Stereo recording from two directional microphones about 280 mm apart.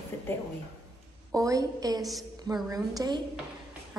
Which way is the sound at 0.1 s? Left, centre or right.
Centre.